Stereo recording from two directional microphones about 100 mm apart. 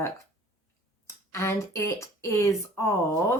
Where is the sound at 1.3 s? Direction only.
30° left (ahead or behind).